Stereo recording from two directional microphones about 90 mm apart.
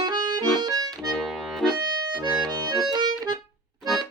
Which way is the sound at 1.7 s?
50° right (ahead or behind).